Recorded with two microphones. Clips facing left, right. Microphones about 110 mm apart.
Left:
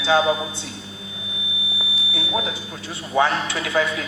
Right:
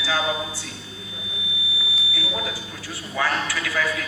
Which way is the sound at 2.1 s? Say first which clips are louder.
Left 5 dB; 25° left (ahead or behind).